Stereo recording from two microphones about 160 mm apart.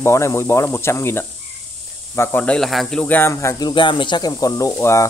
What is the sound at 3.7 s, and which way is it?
Speech, 30° left (ahead or behind).